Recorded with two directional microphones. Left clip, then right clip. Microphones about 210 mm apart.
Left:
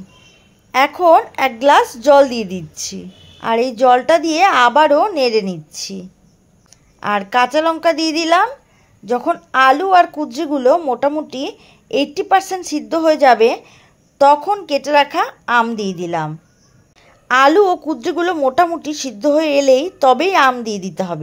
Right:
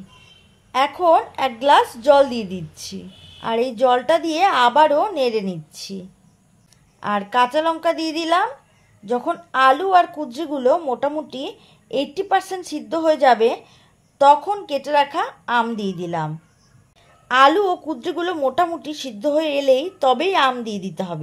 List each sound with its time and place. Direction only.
0.7 s speech: 25° left (ahead or behind)